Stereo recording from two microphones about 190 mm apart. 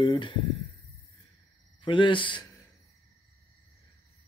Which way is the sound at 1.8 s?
25° left (ahead or behind).